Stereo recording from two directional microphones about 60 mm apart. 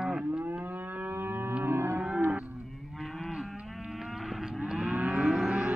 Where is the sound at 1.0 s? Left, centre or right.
Right.